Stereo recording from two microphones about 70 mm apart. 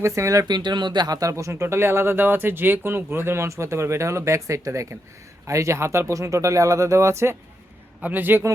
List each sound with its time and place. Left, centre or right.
0.0 s speech: right
0.4 s speech: right
1.2 s speech: right
1.6 s speech: right
8.0 s a man's voice: right